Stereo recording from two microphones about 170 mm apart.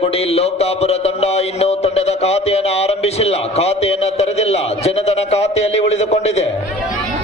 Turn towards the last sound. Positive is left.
turn(degrees=40)  # may be behind; listen again after turning